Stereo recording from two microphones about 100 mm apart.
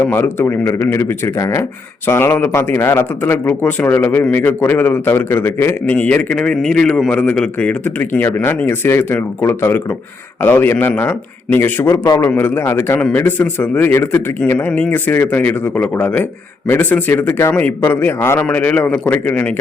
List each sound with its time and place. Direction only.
0.0 s a man's voice: 20° left (ahead or behind)